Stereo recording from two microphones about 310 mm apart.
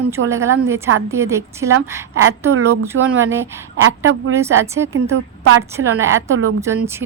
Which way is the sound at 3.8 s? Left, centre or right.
Right.